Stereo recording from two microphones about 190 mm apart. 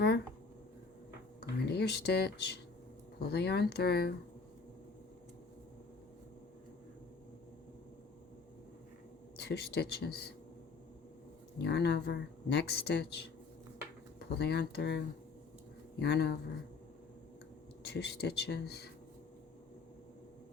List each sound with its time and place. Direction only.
1.4 s a sound: 60° left (ahead or behind)
3.2 s speech: 60° left (ahead or behind)
9.4 s speech: 60° left (ahead or behind)
11.6 s speech: 60° left (ahead or behind)
14.3 s speech: 60° left (ahead or behind)
17.8 s speech: 60° left (ahead or behind)